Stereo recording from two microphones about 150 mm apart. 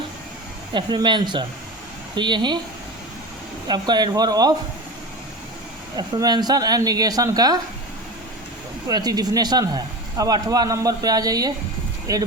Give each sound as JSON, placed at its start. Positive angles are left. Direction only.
{"t": 0.7, "sound": "speech", "side_deg": -30}
{"t": 3.7, "sound": "speech", "side_deg": -30}
{"t": 6.0, "sound": "speech", "side_deg": -25}
{"t": 8.9, "sound": "speech", "side_deg": -25}